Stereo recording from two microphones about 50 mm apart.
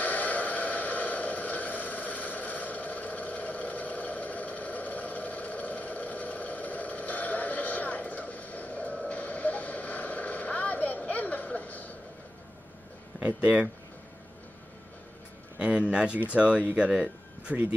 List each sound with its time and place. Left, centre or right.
0.0 s a sound: left
13.2 s speech: right
15.6 s speech: right
17.5 s speech: right